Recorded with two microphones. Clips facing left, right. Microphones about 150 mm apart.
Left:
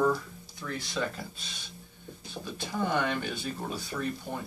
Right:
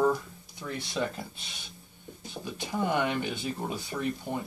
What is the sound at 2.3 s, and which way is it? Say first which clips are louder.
Speech: right 1 dB; 15° right (ahead or behind).